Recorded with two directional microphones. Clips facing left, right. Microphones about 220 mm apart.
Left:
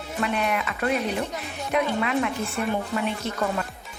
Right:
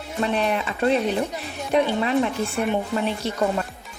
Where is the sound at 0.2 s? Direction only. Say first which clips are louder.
Right 3 dB; 30° right (ahead or behind).